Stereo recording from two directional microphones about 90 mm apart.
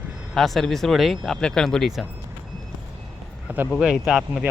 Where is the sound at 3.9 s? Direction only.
Centre (ahead or behind).